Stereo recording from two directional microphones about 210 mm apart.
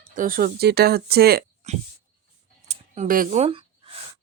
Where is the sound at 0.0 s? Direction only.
40° right (ahead or behind).